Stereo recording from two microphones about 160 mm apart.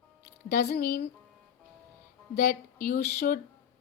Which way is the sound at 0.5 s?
80° left.